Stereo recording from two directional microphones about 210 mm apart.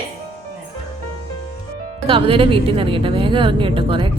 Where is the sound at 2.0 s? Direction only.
25° right (ahead or behind).